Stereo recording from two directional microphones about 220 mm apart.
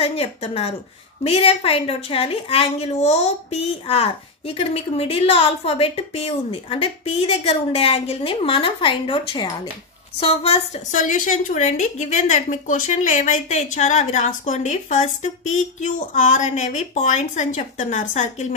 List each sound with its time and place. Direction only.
0.0 s a woman's voice: 25° left (ahead or behind)